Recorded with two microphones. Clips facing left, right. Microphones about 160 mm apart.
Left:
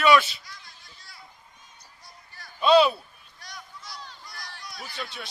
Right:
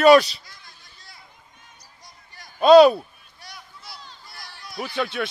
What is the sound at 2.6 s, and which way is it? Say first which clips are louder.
Speech: right 7 dB; 40° right (ahead or behind).